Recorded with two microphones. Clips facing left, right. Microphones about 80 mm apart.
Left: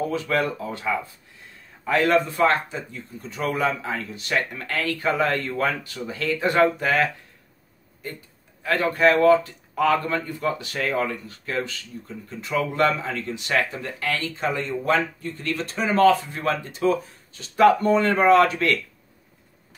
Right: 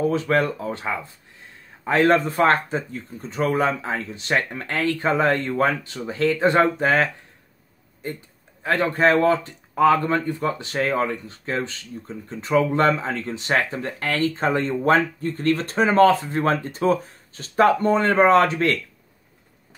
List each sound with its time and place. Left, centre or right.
0.1 s speech: right
8.6 s speech: right